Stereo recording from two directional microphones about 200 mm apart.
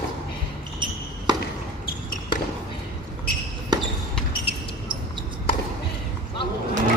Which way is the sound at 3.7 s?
20° right (ahead or behind).